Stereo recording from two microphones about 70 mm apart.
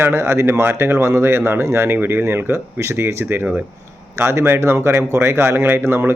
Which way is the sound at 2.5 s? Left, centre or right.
Right.